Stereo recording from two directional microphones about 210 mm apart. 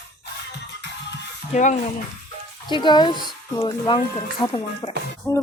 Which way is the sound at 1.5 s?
35° left (ahead or behind).